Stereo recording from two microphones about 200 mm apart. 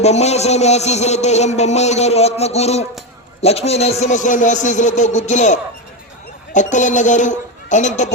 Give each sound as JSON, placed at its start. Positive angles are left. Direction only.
{"t": 0.0, "sound": "a man's voice", "side_deg": 35}